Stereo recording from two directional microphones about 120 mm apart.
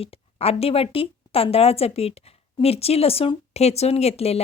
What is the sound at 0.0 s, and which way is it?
Speech, 55° left (ahead or behind).